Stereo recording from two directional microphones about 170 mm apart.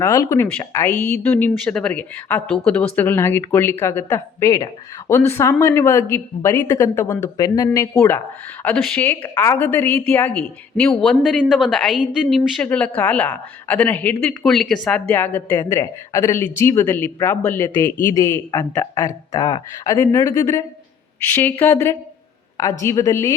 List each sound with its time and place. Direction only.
0.0 s a woman's voice: 20° left (ahead or behind)